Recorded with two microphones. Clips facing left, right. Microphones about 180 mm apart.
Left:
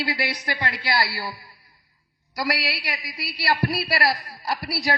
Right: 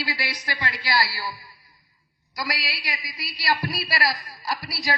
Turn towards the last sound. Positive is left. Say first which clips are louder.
# left 3 dB
turn(degrees=60)  # may be behind; listen again after turning